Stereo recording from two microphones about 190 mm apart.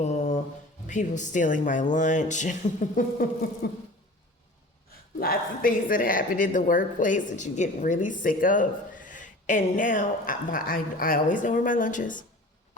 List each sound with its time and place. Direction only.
0.0 s mantra: 35° left (ahead or behind)
0.9 s speech: 40° left (ahead or behind)
5.2 s speech: 50° left (ahead or behind)